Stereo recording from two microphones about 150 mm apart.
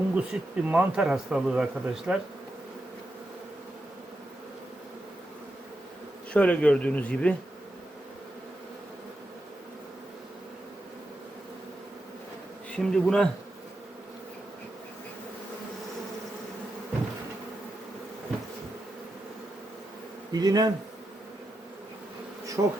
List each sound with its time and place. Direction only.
0.1 s speech: 10° right (ahead or behind)
6.3 s speech: 10° left (ahead or behind)
12.7 s speech: 5° left (ahead or behind)
20.3 s speech: 25° right (ahead or behind)
22.6 s speech: 25° right (ahead or behind)